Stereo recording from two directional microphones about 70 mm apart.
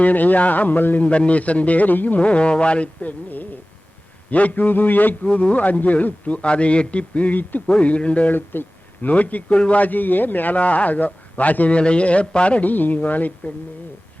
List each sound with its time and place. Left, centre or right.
0.0 s a man's voice: left